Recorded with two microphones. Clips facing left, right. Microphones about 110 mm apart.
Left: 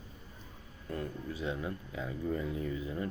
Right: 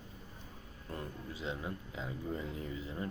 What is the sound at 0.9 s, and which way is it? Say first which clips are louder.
Speech: left 5 dB; 25° right (ahead or behind).